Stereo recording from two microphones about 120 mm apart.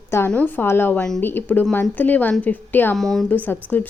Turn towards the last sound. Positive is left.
turn(degrees=15)  # may be behind; listen again after turning